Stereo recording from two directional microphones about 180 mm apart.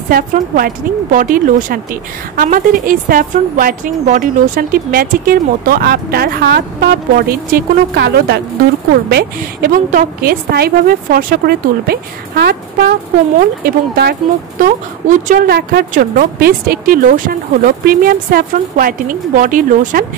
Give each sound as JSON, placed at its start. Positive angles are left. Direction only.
{"t": 0.1, "sound": "a woman's voice", "side_deg": -50}
{"t": 9.1, "sound": "a woman's voice", "side_deg": -55}
{"t": 14.6, "sound": "speech", "side_deg": -45}